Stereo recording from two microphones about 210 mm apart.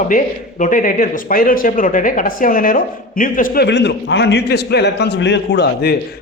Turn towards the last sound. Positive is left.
turn(degrees=50)  # may be behind; listen again after turning